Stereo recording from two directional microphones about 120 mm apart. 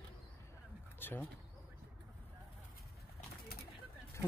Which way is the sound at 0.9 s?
15° left (ahead or behind).